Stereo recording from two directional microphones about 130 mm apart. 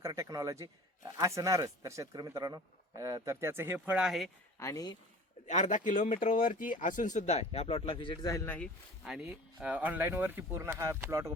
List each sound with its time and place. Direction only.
0.0 s a man's voice: 25° right (ahead or behind); by 4.3 s 5° right (ahead or behind)
4.6 s speech: 30° left (ahead or behind)
5.5 s speech: 70° left (ahead or behind); by 8.5 s 25° left (ahead or behind)
9.0 s speech: 5° right (ahead or behind); by 11.3 s 20° right (ahead or behind)